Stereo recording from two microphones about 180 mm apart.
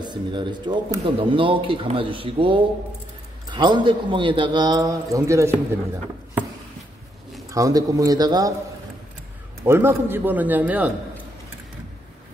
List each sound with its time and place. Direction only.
0.0 s speech: 25° right (ahead or behind)
7.5 s speech: 20° right (ahead or behind)
9.7 s a man's voice: 10° right (ahead or behind)